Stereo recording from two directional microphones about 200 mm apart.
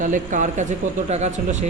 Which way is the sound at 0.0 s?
40° right (ahead or behind).